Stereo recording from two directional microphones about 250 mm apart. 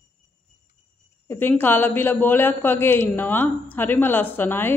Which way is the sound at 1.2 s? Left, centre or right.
Centre.